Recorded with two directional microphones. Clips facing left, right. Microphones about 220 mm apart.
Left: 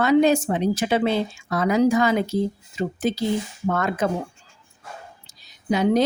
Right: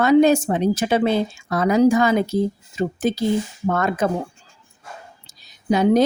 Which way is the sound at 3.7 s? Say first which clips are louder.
Right 2 dB; 45° right (ahead or behind).